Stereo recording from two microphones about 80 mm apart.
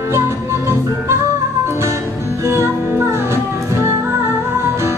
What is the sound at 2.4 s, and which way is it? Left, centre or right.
Music, right.